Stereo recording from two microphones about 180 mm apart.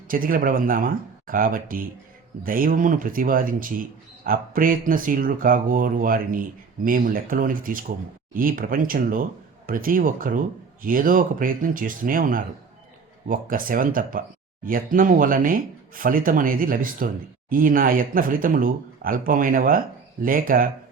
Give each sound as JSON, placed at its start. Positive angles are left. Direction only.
{"t": 0.1, "sound": "speech", "side_deg": -50}